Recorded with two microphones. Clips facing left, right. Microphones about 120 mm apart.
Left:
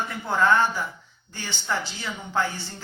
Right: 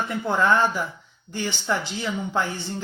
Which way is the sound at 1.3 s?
20° right (ahead or behind).